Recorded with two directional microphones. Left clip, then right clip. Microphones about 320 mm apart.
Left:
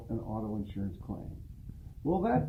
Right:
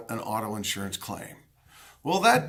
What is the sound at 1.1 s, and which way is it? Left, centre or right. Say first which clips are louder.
Speech: right 7 dB; right.